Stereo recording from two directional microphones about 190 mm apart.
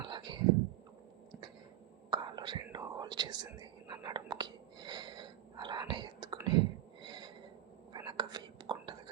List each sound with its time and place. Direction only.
0.0 s whispering: 25° right (ahead or behind)
2.0 s whispering: 25° right (ahead or behind)
7.0 s snort: 25° right (ahead or behind)
7.9 s whispering: 25° right (ahead or behind)